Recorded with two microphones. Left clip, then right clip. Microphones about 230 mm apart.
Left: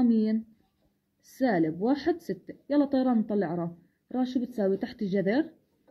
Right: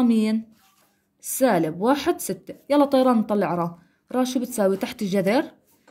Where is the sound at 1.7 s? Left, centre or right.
Right.